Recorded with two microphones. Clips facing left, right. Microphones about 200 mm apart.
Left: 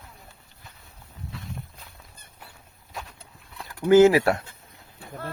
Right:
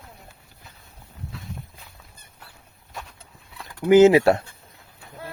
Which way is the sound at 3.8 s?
20° right (ahead or behind).